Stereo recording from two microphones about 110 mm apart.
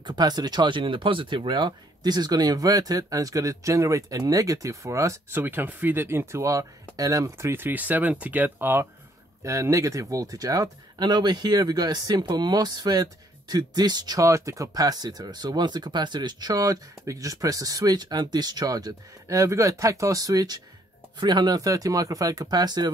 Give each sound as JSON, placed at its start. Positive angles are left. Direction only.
{"t": 0.0, "sound": "speech", "side_deg": -40}
{"t": 5.4, "sound": "speech", "side_deg": -15}